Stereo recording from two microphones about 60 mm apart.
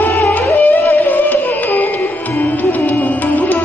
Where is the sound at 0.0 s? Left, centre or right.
Left.